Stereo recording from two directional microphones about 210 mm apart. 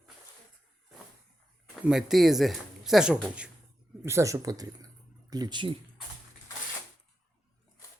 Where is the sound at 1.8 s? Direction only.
Centre (ahead or behind); by 5.7 s 20° right (ahead or behind).